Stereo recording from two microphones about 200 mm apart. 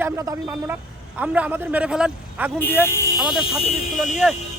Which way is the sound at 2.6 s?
10° left (ahead or behind).